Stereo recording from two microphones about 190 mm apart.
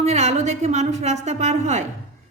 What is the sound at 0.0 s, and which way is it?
A woman's voice, 35° right (ahead or behind).